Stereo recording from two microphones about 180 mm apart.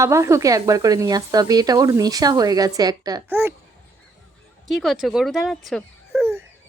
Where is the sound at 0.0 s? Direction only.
15° right (ahead or behind).